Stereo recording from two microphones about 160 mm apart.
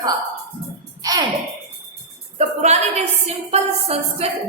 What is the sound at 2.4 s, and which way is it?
A woman's voice, 45° right (ahead or behind).